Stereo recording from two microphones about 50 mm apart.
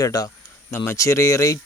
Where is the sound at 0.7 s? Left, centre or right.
Left.